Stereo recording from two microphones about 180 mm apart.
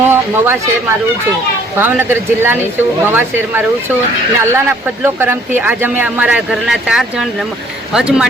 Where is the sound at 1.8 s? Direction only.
10° right (ahead or behind).